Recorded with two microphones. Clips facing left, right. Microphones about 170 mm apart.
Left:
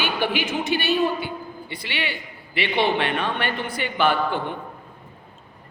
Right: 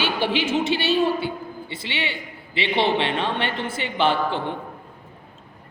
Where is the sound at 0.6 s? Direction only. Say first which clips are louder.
Left 1 dB; 25° right (ahead or behind).